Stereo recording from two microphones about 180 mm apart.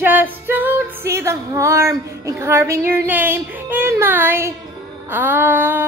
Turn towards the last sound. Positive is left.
turn(degrees=-10)  # may be behind; listen again after turning